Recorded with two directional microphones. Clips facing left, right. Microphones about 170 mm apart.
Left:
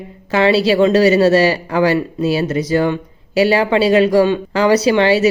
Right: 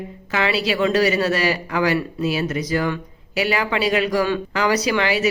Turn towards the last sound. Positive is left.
turn(degrees=30)  # may be behind; listen again after turning